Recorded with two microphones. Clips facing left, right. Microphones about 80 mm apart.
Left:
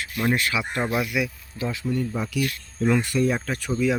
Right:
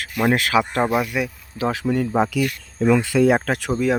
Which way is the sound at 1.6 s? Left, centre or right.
Right.